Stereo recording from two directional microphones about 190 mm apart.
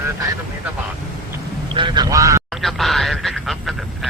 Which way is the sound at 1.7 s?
25° right (ahead or behind).